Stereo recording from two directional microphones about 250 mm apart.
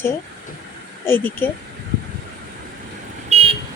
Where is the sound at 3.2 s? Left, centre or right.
Right.